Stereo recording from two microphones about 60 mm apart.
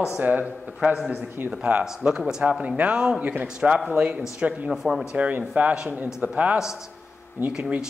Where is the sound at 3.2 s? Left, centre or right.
Right.